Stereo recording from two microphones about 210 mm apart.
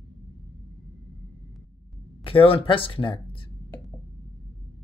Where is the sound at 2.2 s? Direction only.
25° left (ahead or behind).